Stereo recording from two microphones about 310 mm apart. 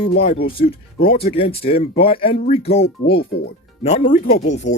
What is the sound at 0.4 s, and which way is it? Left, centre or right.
Speech, left.